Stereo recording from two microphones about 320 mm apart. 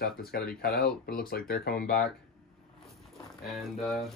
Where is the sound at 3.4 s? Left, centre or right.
Centre.